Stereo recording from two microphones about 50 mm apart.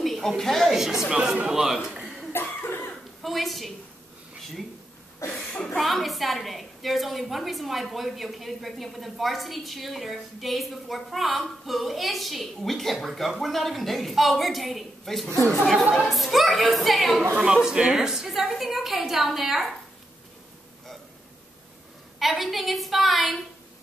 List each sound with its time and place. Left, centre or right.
0.0 s a woman's voice: centre
1.1 s a man's voice: centre
1.9 s chuckle: centre
2.3 s cough: left
3.2 s a woman's voice: centre
5.2 s speech: left
5.8 s a woman's voice: centre
17.2 s speech: right
17.5 s a man's voice: centre
22.2 s a woman's voice: centre